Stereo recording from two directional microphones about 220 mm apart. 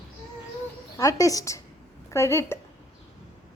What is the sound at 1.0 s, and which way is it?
A woman's voice, 15° left (ahead or behind).